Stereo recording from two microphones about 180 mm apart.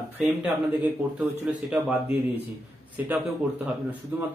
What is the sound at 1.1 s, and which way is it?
Speech, 10° right (ahead or behind).